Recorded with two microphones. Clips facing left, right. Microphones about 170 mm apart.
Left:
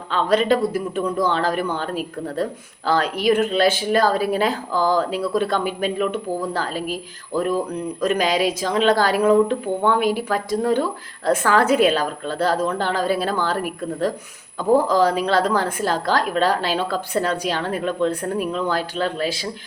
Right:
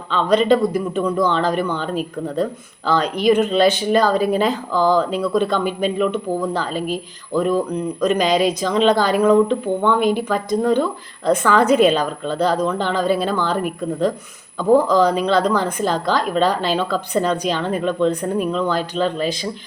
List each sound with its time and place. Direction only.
0.1 s a woman's voice: 10° left (ahead or behind)
2.9 s a woman's voice: 10° left (ahead or behind)